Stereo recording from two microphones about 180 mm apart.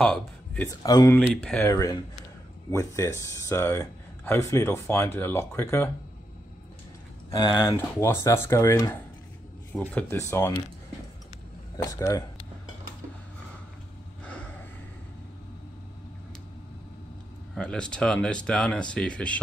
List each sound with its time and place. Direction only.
0.0 s a man's voice: 5° left (ahead or behind)
1.2 s speech: 5° left (ahead or behind)
1.6 s speech: 20° left (ahead or behind)
7.2 s speech: 25° left (ahead or behind)
11.7 s speech: 20° left (ahead or behind)
17.6 s speech: 5° left (ahead or behind)